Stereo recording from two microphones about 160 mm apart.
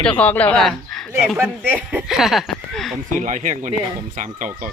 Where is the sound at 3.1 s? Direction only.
50° right (ahead or behind).